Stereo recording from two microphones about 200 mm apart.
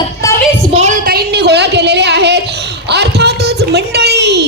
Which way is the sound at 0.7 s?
35° right (ahead or behind).